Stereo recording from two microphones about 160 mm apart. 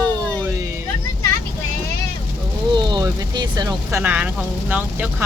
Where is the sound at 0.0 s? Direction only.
25° right (ahead or behind).